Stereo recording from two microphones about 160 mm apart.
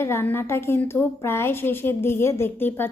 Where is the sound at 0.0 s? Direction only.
15° left (ahead or behind).